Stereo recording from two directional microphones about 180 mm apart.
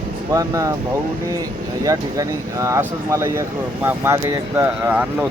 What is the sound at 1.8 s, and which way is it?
Speech, 20° right (ahead or behind).